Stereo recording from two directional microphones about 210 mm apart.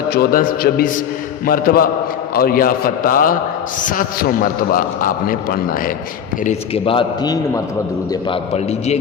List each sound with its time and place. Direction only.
0.1 s a man's voice: 45° left (ahead or behind)
6.4 s a man's voice: 30° left (ahead or behind)